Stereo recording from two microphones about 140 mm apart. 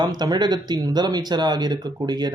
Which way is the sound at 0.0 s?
30° right (ahead or behind).